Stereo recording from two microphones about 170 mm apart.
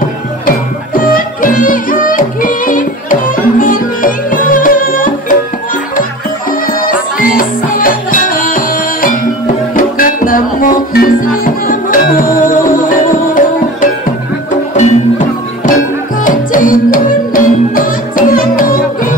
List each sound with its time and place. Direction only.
0.5 s music: 55° left (ahead or behind)
6.8 s music: 55° left (ahead or behind)